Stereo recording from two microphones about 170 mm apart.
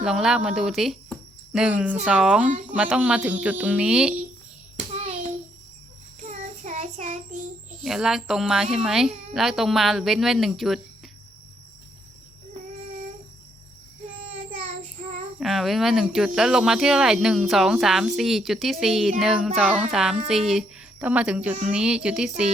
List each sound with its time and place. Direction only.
0.0 s a woman's voice: 5° right (ahead or behind)
4.8 s hands: 40° right (ahead or behind)
6.2 s child singing: 45° right (ahead or behind)
7.9 s a woman's voice: centre (ahead or behind)
15.4 s a woman's voice: centre (ahead or behind)